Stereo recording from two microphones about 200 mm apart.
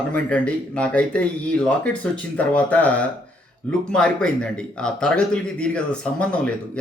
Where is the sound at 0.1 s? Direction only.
5° left (ahead or behind).